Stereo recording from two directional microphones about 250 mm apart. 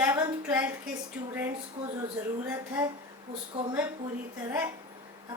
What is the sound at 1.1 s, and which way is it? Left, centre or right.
Speech, centre.